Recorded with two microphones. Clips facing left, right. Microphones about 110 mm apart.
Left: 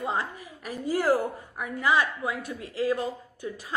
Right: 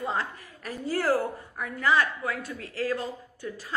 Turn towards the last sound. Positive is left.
turn(degrees=15)  # may be behind; listen again after turning